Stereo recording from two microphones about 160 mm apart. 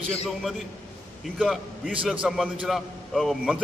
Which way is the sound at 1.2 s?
Centre (ahead or behind).